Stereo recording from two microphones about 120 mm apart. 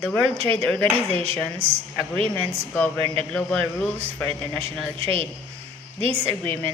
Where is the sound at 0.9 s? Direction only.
60° right (ahead or behind).